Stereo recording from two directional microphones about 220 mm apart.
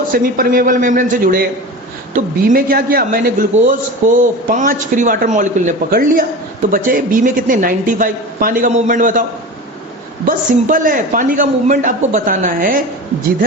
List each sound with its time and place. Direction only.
0.1 s a man's voice: 40° right (ahead or behind)
10.2 s a man's voice: 40° right (ahead or behind)